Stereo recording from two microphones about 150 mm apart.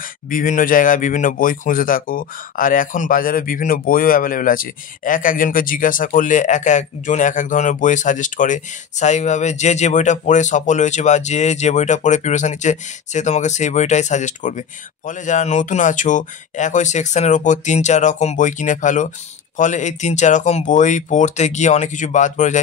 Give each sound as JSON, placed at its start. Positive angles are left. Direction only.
{"t": 0.0, "sound": "speech", "side_deg": 65}